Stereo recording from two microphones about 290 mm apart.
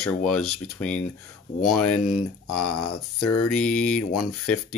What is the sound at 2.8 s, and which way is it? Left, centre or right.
Speech, left.